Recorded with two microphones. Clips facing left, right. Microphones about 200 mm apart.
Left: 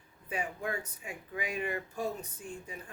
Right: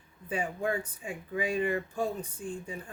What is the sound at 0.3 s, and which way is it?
Speech, 30° right (ahead or behind).